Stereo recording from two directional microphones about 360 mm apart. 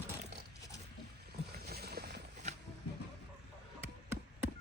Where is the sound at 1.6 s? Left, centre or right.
Right.